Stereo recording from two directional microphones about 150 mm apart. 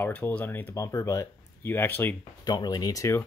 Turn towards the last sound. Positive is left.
turn(degrees=20)  # may be behind; listen again after turning